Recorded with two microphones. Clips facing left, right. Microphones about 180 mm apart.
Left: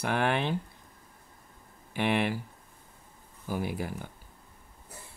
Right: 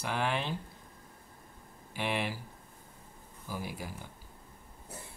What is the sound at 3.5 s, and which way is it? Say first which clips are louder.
Speech: left 7 dB; 55° left (ahead or behind).